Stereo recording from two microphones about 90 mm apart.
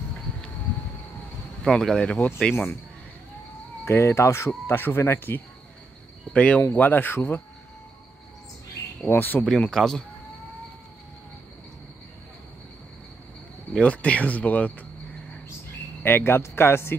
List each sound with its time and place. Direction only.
1.6 s speech: 5° left (ahead or behind)
2.5 s speech: 25° left (ahead or behind)
3.8 s speech: 30° left (ahead or behind)
9.0 s speech: 20° left (ahead or behind)
9.4 s speech: 5° left (ahead or behind)
13.7 s speech: 15° left (ahead or behind)
16.0 s speech: 25° left (ahead or behind)